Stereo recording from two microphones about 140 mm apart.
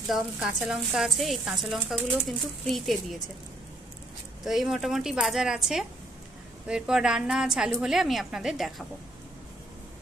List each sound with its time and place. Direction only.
0.1 s speech: 5° right (ahead or behind)
4.5 s speech: centre (ahead or behind)